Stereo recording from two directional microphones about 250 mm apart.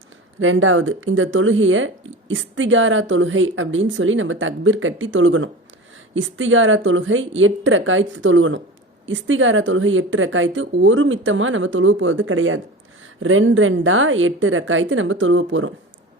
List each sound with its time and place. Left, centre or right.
0.3 s speech: right